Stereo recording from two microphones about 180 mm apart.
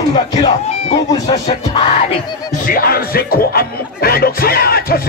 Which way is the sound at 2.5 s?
50° left (ahead or behind).